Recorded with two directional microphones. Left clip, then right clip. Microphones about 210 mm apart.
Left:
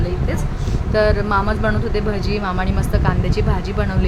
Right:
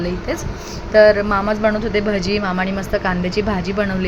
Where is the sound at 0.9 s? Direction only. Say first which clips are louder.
Right 5 dB; 10° right (ahead or behind).